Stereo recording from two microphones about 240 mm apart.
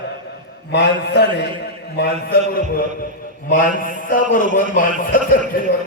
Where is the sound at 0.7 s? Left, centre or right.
Left.